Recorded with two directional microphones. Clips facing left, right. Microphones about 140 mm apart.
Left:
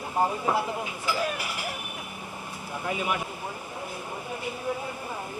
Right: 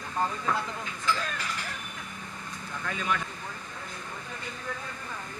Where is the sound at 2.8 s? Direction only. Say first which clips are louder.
Left 2 dB; 15° left (ahead or behind).